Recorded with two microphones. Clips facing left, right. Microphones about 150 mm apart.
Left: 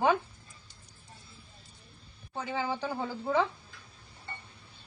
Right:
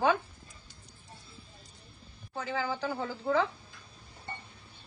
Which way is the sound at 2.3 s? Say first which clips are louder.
Even; 20° left (ahead or behind).